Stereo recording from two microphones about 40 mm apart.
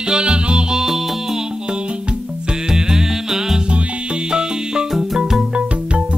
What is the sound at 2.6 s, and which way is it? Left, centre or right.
Music, centre.